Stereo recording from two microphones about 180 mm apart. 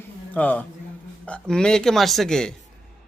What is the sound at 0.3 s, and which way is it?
A man's voice, 10° left (ahead or behind).